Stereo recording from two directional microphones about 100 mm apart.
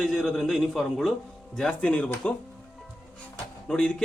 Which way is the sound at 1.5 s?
10° left (ahead or behind).